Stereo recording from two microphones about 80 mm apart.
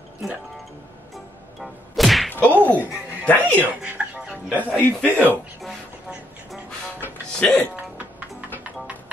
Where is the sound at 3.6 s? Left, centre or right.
Centre.